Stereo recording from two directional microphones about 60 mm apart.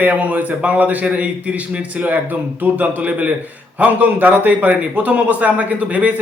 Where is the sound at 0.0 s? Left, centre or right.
Right.